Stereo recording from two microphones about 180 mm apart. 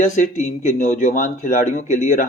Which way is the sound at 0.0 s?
45° left (ahead or behind).